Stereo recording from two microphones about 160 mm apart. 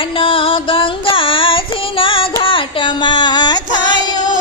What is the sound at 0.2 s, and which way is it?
Child singing, 35° left (ahead or behind).